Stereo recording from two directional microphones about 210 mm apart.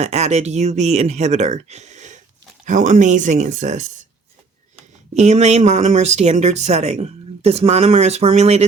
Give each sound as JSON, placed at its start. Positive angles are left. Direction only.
{"t": 0.0, "sound": "speech", "side_deg": -30}
{"t": 5.1, "sound": "speech", "side_deg": -30}